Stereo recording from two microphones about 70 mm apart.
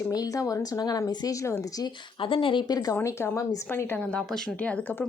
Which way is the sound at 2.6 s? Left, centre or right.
Left.